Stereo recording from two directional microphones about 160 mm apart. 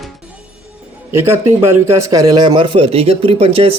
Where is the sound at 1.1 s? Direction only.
15° right (ahead or behind).